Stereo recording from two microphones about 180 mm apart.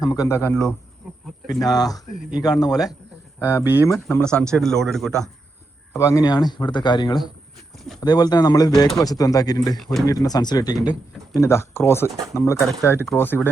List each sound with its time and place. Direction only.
0.0 s speech: 20° left (ahead or behind)
1.5 s speech: 20° left (ahead or behind); by 5.3 s centre (ahead or behind)
5.9 s speech: 15° left (ahead or behind)
9.7 s speech: centre (ahead or behind)
10.1 s speech: 20° left (ahead or behind)